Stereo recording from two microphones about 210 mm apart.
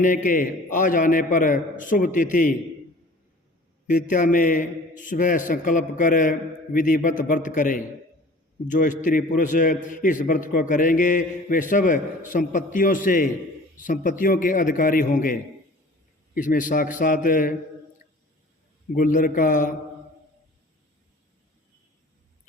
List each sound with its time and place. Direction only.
0.3 s a man's voice: 40° left (ahead or behind)
4.1 s a man's voice: 40° left (ahead or behind)
18.9 s a man's voice: 40° left (ahead or behind)